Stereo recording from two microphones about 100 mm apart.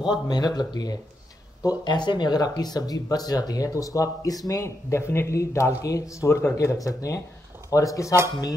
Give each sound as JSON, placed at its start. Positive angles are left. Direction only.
{"t": 0.1, "sound": "speech", "side_deg": 45}